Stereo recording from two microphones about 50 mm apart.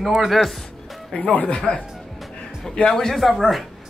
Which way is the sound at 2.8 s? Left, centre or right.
Centre.